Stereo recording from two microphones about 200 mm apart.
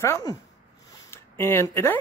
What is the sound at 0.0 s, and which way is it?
Speech, 15° left (ahead or behind).